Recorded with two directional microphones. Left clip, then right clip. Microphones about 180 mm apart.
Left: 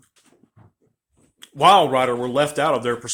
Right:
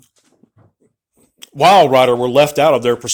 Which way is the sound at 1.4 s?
30° right (ahead or behind).